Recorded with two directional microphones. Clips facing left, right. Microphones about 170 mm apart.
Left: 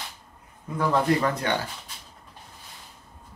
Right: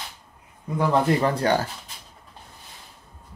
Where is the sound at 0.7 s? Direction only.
30° right (ahead or behind).